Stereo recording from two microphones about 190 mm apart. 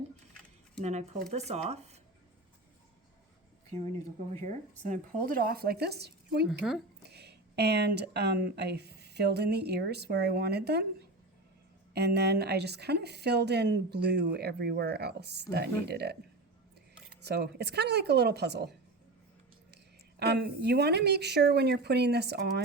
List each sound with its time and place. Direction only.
0.9 s speech: 40° right (ahead or behind)
4.3 s speech: 40° right (ahead or behind); by 6.5 s 60° right (ahead or behind)
7.0 s a sound: 60° right (ahead or behind)
8.4 s a woman's voice: 60° right (ahead or behind)
11.9 s a woman's voice: 60° right (ahead or behind)
17.2 s a woman's voice: 60° right (ahead or behind)
19.7 s a woman's voice: 60° right (ahead or behind)